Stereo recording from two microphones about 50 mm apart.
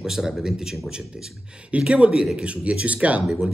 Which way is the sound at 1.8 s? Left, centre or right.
Right.